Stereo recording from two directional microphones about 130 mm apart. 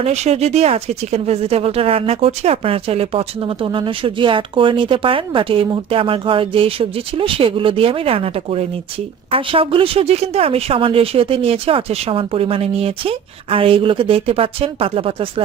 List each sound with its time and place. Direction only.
0.0 s speech: 55° right (ahead or behind)